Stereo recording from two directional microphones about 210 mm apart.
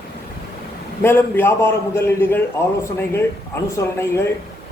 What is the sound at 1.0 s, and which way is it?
A man's voice, 10° left (ahead or behind).